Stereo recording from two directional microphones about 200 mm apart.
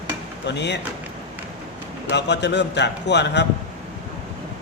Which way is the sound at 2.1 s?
60° left (ahead or behind).